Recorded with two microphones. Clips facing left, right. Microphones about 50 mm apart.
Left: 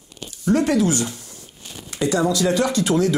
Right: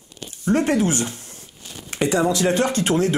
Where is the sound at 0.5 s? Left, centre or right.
Right.